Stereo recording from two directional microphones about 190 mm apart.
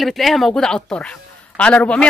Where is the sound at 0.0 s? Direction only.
Centre (ahead or behind).